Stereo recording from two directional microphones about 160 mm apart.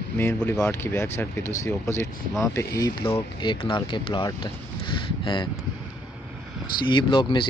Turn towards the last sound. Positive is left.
turn(degrees=30)  # may be behind; listen again after turning